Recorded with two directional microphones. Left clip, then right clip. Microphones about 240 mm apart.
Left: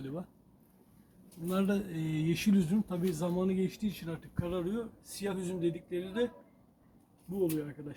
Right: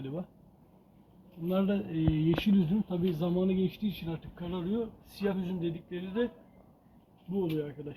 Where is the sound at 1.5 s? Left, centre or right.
Centre.